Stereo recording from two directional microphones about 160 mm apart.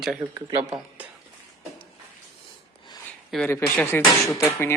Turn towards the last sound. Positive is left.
turn(degrees=15)  # may be behind; listen again after turning